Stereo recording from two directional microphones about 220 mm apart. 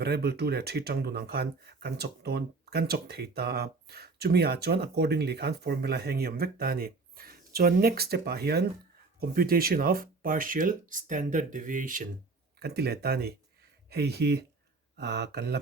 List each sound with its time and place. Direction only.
0.0 s speech: 45° right (ahead or behind)